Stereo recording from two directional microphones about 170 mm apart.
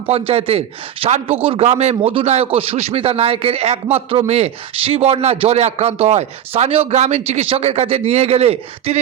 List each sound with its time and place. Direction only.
0.1 s a man's voice: 35° right (ahead or behind)